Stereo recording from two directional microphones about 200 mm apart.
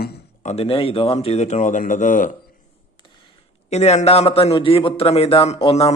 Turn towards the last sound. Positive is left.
turn(degrees=30)  # may be behind; listen again after turning